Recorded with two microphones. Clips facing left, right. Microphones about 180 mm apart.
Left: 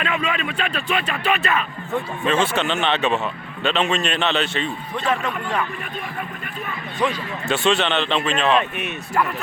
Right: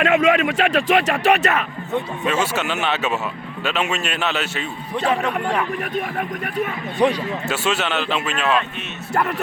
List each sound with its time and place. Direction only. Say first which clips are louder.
0.0 s speech: right 8 dB; 80° right
2.2 s a man's voice: left 3 dB; 5° right (ahead or behind)
5.0 s a man's voice: right 3 dB; 35° right (ahead or behind)
7.4 s speech: left 5 dB; 5° right (ahead or behind)